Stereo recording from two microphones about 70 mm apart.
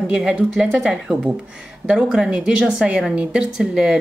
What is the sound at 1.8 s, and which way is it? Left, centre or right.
Speech, centre.